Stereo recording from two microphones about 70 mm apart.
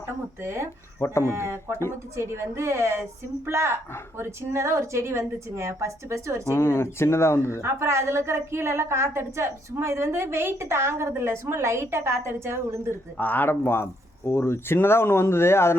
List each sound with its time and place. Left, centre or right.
0.4 s a woman's voice: right
0.9 s speech: left
1.2 s a woman's voice: right
6.5 s speech: left
7.6 s a woman's voice: right
12.9 s speech: left